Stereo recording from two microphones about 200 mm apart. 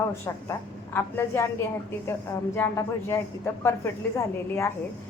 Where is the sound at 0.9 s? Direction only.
10° left (ahead or behind).